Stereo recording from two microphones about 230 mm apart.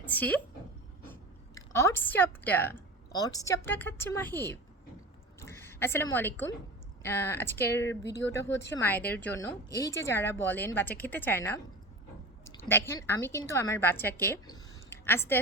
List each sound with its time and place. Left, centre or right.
0.0 s a woman's voice: centre
5.4 s a sound: centre
7.0 s a woman's voice: centre
12.6 s a woman's voice: centre